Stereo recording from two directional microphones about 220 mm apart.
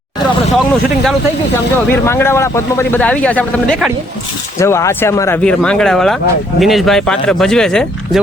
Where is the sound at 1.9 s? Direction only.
10° left (ahead or behind).